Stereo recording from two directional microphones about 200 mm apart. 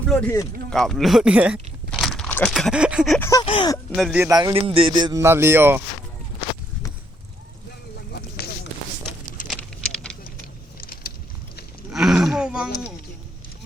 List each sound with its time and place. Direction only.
0.1 s speech: 10° left (ahead or behind)
3.2 s speech: 15° left (ahead or behind)
3.9 s speech: centre (ahead or behind)
4.2 s speech: 15° right (ahead or behind)
9.6 s vehicle: 5° left (ahead or behind)
10.8 s vehicle: 45° left (ahead or behind)
11.9 s a sound: centre (ahead or behind)